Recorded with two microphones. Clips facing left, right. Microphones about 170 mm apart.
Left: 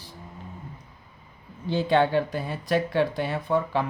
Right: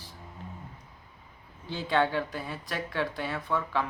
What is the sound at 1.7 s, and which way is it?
Speech, 70° left (ahead or behind).